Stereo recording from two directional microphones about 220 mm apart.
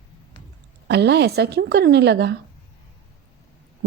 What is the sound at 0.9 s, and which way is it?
A woman's voice, 50° right (ahead or behind).